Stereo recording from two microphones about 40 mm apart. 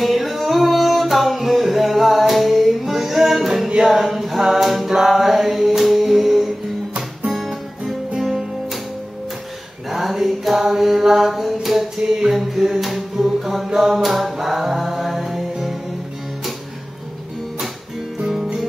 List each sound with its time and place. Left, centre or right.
0.0 s singing: centre
3.6 s music: centre
4.0 s mantra: centre
8.2 s music: centre
9.8 s mantra: centre
12.3 s music: centre
13.7 s mantra: centre
18.2 s music: centre